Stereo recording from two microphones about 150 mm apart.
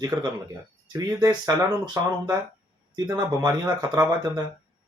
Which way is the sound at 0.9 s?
20° right (ahead or behind).